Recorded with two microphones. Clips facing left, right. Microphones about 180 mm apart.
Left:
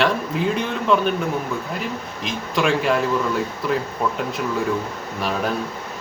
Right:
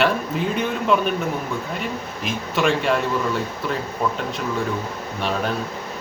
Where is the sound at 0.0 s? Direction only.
5° right (ahead or behind).